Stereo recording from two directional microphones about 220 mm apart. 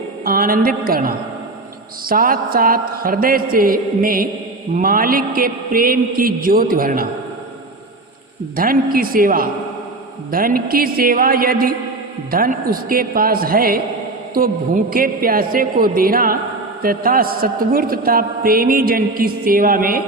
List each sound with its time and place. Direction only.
0.3 s a man's voice: 40° right (ahead or behind)
8.5 s a man's voice: 40° right (ahead or behind)